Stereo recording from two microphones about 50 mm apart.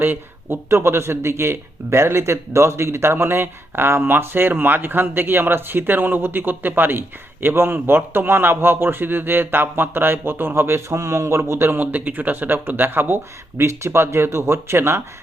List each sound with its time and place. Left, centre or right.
0.0 s speech: right
0.7 s speech: right
3.2 s a man's voice: right
11.8 s speech: right
13.6 s speech: right